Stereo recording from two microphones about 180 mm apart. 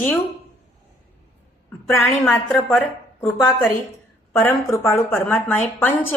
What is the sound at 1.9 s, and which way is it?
A woman's voice, 15° left (ahead or behind).